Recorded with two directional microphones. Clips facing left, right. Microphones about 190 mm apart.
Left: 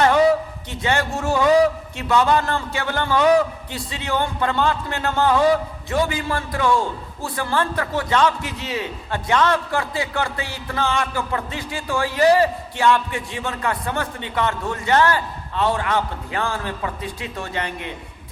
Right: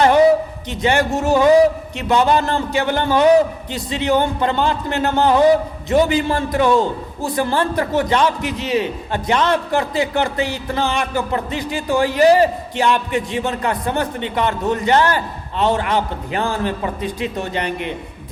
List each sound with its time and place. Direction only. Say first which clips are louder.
0.7 s a man's voice: right 5 dB; 20° right (ahead or behind)